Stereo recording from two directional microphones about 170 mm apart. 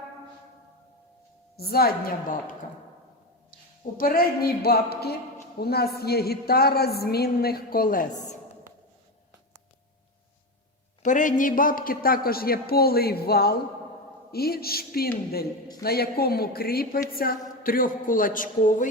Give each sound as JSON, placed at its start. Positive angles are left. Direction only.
{"t": 1.5, "sound": "a woman's voice", "side_deg": 65}
{"t": 3.9, "sound": "a woman's voice", "side_deg": 60}
{"t": 11.0, "sound": "a woman's voice", "side_deg": 50}